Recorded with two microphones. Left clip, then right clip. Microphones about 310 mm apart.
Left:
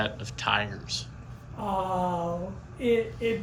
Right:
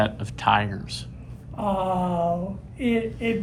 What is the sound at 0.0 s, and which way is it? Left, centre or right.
Speech, centre.